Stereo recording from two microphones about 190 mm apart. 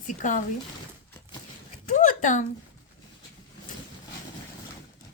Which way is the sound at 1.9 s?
40° left (ahead or behind).